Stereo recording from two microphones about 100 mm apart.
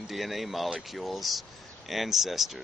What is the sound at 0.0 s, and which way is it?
Speech, centre (ahead or behind).